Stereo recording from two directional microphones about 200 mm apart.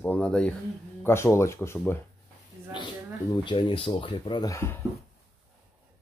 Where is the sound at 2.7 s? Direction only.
25° left (ahead or behind).